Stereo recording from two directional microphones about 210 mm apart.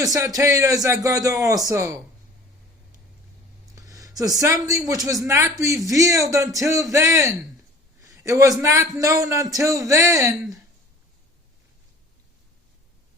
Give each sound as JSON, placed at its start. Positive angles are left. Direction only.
{"t": 0.0, "sound": "a man's voice", "side_deg": -15}
{"t": 3.8, "sound": "a man's voice", "side_deg": -15}